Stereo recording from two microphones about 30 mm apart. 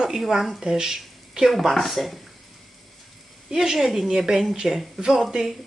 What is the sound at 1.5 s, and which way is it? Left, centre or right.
Speech, centre.